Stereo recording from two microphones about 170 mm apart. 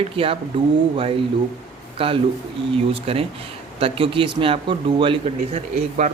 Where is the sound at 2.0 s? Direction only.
35° right (ahead or behind).